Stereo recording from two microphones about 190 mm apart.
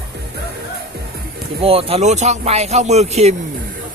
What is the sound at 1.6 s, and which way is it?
Speech, 30° right (ahead or behind).